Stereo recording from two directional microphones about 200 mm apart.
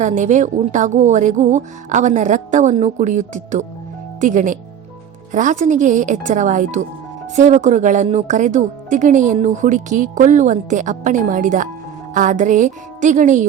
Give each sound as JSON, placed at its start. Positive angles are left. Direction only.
{"t": 0.0, "sound": "speech", "side_deg": -40}